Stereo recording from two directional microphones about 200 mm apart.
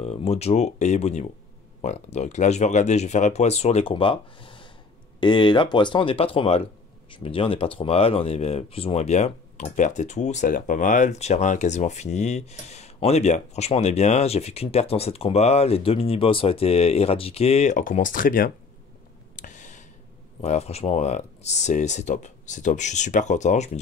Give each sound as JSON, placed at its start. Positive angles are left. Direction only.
{"t": 0.0, "sound": "speech", "side_deg": 30}
{"t": 19.3, "sound": "a sound", "side_deg": 40}
{"t": 20.4, "sound": "speech", "side_deg": 30}